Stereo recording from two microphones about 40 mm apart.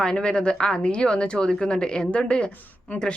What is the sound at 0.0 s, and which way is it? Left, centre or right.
Speech, left.